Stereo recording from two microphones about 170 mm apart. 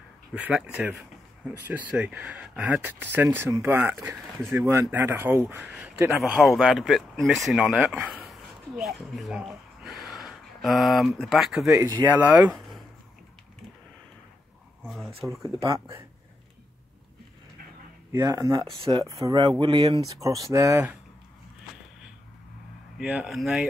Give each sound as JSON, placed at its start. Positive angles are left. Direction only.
{"t": 0.3, "sound": "speech", "side_deg": -5}
{"t": 11.7, "sound": "speech", "side_deg": -15}
{"t": 14.8, "sound": "a sound", "side_deg": 0}
{"t": 15.4, "sound": "speech", "side_deg": -20}
{"t": 18.2, "sound": "speech", "side_deg": -20}
{"t": 21.7, "sound": "a sound", "side_deg": 0}
{"t": 22.9, "sound": "speech", "side_deg": -5}